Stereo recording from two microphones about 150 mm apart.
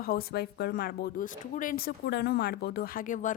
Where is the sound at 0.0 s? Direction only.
85° left.